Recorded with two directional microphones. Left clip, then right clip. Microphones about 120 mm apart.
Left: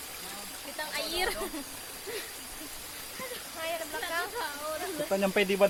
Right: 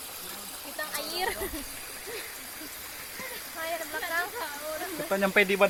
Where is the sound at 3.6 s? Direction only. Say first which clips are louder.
Right 1 dB; 25° right (ahead or behind).